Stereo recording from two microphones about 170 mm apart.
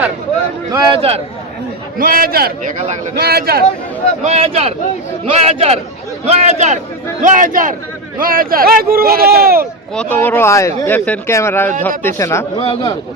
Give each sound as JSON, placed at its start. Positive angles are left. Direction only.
{"t": 0.7, "sound": "speech", "side_deg": -20}
{"t": 0.9, "sound": "speech", "side_deg": -35}
{"t": 2.0, "sound": "speech", "side_deg": -55}
{"t": 2.7, "sound": "a man's voice", "side_deg": -45}
{"t": 3.2, "sound": "speech", "side_deg": -65}
{"t": 4.2, "sound": "a man's voice", "side_deg": -40}
{"t": 9.9, "sound": "speech", "side_deg": 10}
{"t": 12.5, "sound": "speech", "side_deg": 30}